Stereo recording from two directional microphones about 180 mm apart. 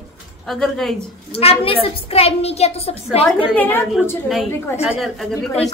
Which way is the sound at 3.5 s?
10° left (ahead or behind).